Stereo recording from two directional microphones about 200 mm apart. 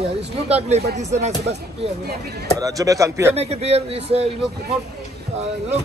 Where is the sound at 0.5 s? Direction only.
30° right (ahead or behind).